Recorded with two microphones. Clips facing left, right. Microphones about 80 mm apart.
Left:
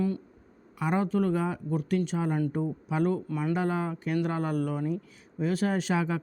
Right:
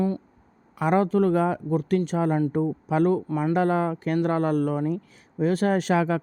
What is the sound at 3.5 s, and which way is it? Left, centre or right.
Speech, right.